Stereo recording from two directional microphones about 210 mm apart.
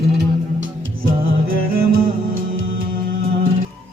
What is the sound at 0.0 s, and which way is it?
Music, 55° right (ahead or behind).